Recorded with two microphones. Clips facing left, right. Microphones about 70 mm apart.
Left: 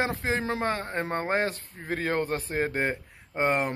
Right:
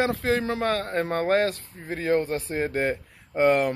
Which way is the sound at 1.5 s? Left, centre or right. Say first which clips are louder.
Even; left.